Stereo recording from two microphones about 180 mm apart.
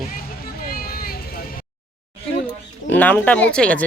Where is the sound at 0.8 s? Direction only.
55° left (ahead or behind).